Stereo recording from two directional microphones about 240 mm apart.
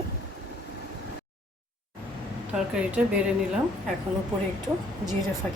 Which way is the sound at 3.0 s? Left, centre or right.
Centre.